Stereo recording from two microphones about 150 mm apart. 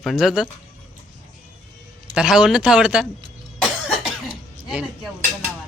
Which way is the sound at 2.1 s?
5° right (ahead or behind).